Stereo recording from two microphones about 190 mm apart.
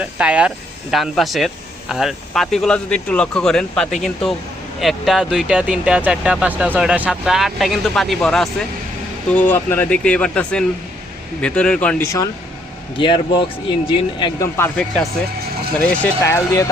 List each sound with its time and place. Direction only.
0.0 s speech: 5° right (ahead or behind); by 12.3 s 15° left (ahead or behind)
13.0 s speech: 25° left (ahead or behind)
14.5 s speech: 10° left (ahead or behind)